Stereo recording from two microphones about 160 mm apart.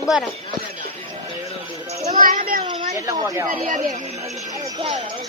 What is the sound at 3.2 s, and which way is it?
Speech, 15° right (ahead or behind).